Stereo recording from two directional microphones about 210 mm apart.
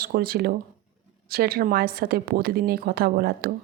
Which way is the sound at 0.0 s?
45° right (ahead or behind).